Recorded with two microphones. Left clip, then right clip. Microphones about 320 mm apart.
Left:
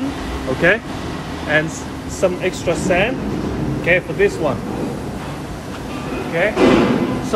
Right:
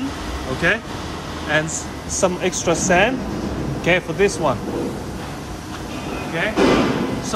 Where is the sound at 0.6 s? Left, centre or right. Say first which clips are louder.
Left 4 dB; centre.